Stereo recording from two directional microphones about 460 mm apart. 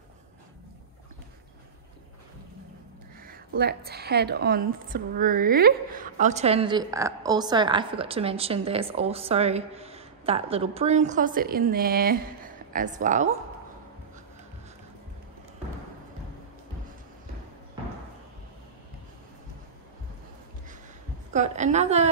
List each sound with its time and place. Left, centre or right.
3.3 s a woman's voice: centre
21.3 s a woman's voice: centre